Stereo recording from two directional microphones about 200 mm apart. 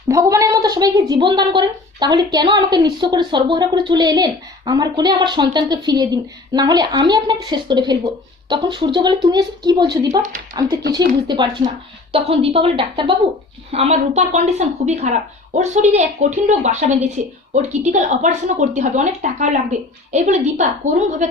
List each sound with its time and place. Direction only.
0.1 s a woman's voice: 15° right (ahead or behind); by 21.2 s 35° right (ahead or behind)